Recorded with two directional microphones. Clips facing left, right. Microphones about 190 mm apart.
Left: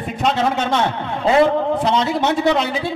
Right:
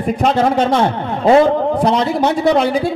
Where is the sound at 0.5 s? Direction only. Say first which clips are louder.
Right 5 dB; 35° right (ahead or behind).